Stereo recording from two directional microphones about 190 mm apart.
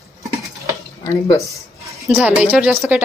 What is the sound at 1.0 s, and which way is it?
Speech, 15° left (ahead or behind).